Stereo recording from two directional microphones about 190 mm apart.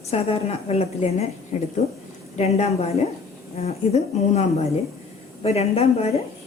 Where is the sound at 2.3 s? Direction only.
35° left (ahead or behind).